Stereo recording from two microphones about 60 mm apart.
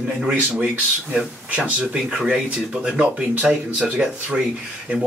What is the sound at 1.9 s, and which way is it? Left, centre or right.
Speech, centre.